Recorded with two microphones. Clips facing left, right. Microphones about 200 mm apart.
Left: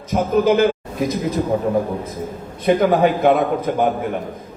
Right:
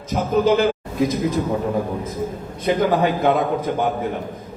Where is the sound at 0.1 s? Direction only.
50° left (ahead or behind).